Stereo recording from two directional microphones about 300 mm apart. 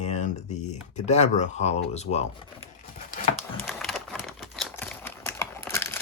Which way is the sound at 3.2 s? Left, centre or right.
Left.